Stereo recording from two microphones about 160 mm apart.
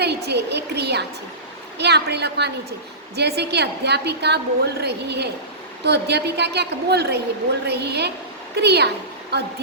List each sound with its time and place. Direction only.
0.3 s a woman's voice: 90° right